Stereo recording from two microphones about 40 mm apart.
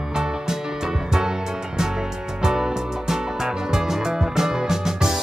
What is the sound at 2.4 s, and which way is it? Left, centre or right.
Music, centre.